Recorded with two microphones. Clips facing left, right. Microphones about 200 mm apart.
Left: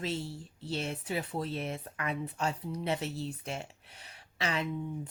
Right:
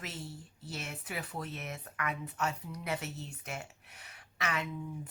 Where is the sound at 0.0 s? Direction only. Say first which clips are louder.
Left 8 dB; 30° left (ahead or behind).